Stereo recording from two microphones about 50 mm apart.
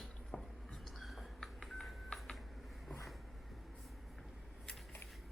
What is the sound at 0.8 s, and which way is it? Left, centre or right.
Whispering, centre.